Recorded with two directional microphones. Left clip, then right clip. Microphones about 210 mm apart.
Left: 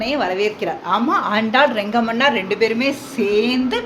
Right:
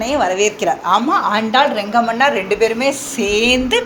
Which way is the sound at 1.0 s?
15° left (ahead or behind).